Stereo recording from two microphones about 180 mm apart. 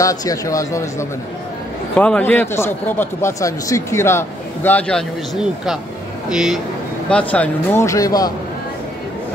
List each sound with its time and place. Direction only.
0.0 s speech: 20° left (ahead or behind)